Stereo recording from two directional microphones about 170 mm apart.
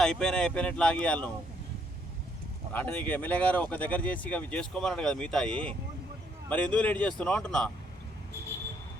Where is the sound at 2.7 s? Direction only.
10° left (ahead or behind).